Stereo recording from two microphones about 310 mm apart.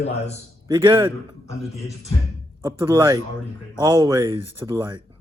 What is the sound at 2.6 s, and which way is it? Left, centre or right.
Speech, centre.